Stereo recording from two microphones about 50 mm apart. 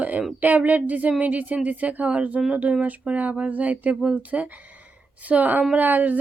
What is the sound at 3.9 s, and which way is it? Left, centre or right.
Speech, centre.